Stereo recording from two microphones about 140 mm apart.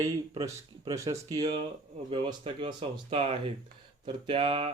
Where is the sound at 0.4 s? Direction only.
25° right (ahead or behind).